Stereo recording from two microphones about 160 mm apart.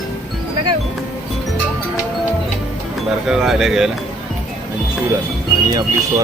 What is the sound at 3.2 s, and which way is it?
Speech, centre (ahead or behind).